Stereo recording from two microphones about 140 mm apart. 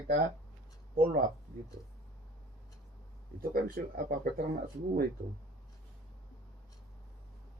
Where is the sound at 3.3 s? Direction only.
90° right.